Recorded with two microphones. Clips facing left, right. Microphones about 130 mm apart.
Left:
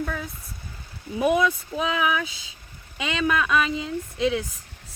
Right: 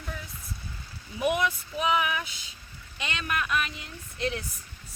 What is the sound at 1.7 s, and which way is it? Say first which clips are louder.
Speech: left 3 dB; 50° left (ahead or behind).